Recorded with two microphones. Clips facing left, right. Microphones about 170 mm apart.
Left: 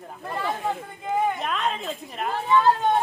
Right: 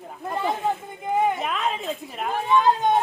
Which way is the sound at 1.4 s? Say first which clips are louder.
Right 1 dB; centre (ahead or behind).